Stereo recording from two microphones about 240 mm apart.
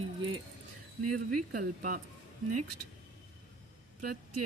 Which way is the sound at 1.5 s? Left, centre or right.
Right.